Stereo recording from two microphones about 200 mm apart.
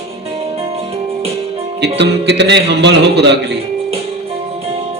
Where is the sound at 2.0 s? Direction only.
60° right (ahead or behind).